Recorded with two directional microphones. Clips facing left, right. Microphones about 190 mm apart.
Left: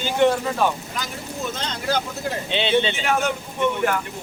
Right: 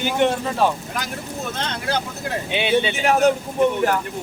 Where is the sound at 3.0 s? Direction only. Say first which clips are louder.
Right 6 dB; 40° right (ahead or behind).